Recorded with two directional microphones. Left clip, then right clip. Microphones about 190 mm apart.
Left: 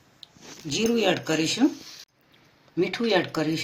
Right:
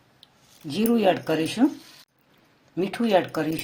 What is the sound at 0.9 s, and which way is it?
Speech, 40° right (ahead or behind).